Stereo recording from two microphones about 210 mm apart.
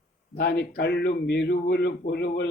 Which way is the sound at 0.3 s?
50° left (ahead or behind).